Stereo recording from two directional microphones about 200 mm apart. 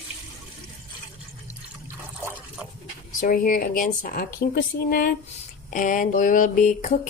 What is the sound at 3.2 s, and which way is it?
Speech, 45° left (ahead or behind).